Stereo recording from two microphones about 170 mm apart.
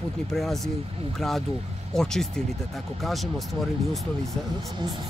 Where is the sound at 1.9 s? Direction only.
Centre (ahead or behind).